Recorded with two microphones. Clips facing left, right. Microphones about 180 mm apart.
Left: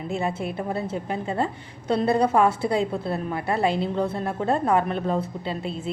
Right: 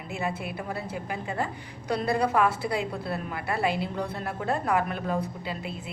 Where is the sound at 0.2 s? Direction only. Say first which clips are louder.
Even; 25° left (ahead or behind).